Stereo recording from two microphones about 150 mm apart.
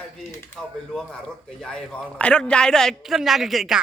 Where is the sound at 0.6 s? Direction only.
5° left (ahead or behind).